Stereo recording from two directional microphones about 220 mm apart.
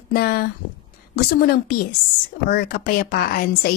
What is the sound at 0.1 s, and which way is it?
A woman's voice, 45° left (ahead or behind).